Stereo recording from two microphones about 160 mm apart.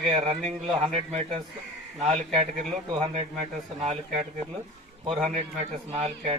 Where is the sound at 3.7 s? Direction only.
40° right (ahead or behind).